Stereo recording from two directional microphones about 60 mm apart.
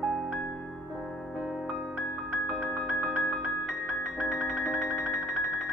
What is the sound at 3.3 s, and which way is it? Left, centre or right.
Music, centre.